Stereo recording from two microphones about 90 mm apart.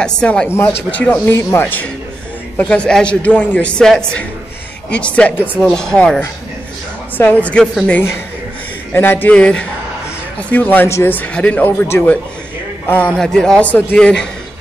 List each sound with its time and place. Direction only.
0.2 s a man's voice: 10° left (ahead or behind)
0.5 s speech: 30° left (ahead or behind)
0.9 s a man's voice: 15° left (ahead or behind)
8.9 s a man's voice: 20° left (ahead or behind)
11.1 s a man's voice: 15° left (ahead or behind)
13.2 s a man's voice: 5° left (ahead or behind)
13.9 s a man's voice: 10° left (ahead or behind)